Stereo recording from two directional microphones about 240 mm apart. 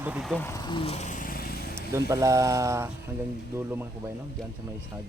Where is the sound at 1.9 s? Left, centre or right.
Centre.